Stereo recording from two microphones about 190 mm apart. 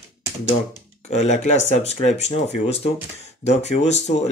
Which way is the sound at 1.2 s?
35° left (ahead or behind).